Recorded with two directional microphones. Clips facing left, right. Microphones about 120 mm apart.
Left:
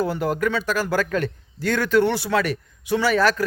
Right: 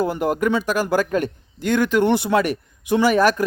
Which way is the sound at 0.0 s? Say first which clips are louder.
Right 2 dB; 15° right (ahead or behind).